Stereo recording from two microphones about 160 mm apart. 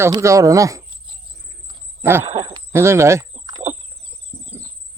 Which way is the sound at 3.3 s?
25° right (ahead or behind).